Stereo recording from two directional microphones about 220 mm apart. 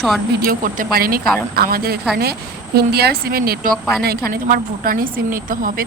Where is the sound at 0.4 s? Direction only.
40° right (ahead or behind).